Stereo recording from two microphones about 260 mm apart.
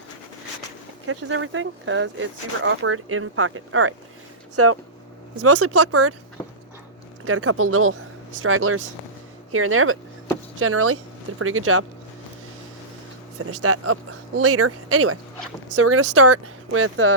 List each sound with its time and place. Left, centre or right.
1.0 s speech: right
7.3 s speech: right
13.4 s speech: right